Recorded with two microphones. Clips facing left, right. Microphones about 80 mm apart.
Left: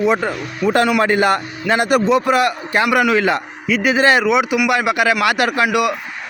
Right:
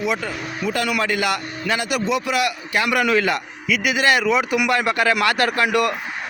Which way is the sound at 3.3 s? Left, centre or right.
Left.